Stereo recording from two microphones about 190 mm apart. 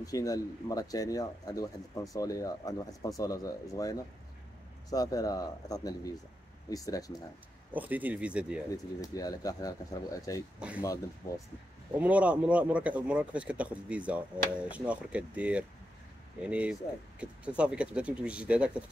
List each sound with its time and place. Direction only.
0.0 s speech: 20° left (ahead or behind)
7.7 s a man's voice: 10° right (ahead or behind)
8.7 s speech: 20° left (ahead or behind)
12.0 s a man's voice: 5° right (ahead or behind)